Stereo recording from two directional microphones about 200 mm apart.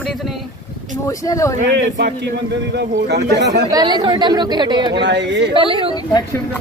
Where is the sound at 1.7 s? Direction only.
60° right (ahead or behind).